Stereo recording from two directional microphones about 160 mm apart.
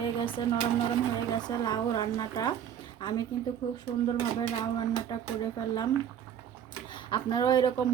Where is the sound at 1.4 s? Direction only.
25° left (ahead or behind).